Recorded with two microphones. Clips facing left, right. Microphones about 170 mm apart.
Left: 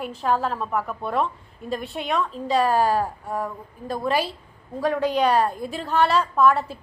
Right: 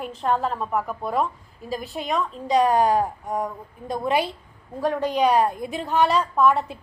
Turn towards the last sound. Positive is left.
turn(degrees=5)  # may be behind; listen again after turning